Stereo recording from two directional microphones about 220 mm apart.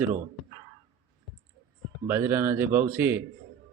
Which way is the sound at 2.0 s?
10° right (ahead or behind).